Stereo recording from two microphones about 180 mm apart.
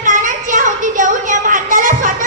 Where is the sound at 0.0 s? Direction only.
45° right (ahead or behind).